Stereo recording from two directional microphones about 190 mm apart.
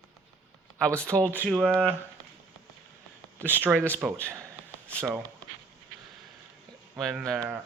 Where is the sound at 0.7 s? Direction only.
5° left (ahead or behind).